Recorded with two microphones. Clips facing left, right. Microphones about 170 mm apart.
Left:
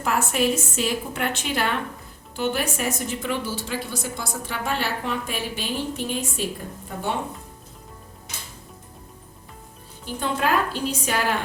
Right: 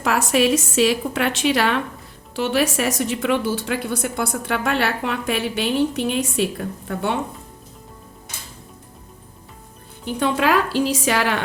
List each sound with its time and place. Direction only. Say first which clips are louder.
0.0 s a woman's voice: right 4 dB; 85° right
10.1 s a woman's voice: right 5 dB; 75° right (ahead or behind)